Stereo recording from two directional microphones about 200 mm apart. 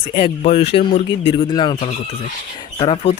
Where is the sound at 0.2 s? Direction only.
30° left (ahead or behind).